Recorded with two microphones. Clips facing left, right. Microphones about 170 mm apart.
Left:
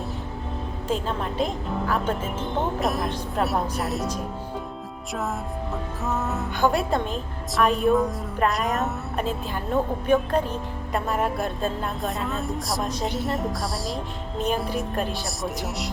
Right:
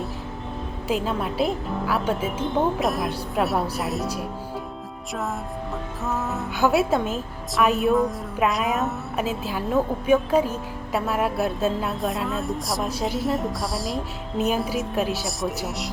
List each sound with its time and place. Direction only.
0.9 s a woman's voice: 5° right (ahead or behind)
6.1 s a woman's voice: centre (ahead or behind)